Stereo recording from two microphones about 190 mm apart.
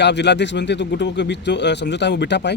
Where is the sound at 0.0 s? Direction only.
65° left (ahead or behind).